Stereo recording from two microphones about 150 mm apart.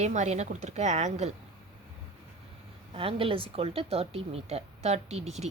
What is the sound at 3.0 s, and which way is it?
Speech, 35° right (ahead or behind).